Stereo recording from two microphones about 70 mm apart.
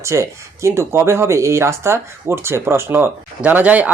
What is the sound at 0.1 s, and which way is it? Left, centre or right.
Speech, right.